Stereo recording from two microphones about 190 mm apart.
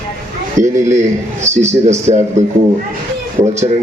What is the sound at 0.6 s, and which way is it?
Speech, 15° right (ahead or behind).